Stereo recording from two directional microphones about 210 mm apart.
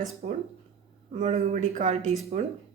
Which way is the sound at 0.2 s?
40° right (ahead or behind).